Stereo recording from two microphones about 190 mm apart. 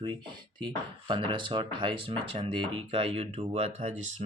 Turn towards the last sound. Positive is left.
turn(degrees=-40)  # may be behind; listen again after turning